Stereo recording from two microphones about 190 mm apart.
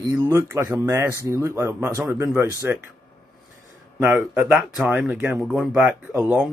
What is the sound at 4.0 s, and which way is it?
Speech, 10° right (ahead or behind).